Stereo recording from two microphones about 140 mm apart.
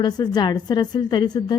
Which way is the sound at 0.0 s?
30° left (ahead or behind).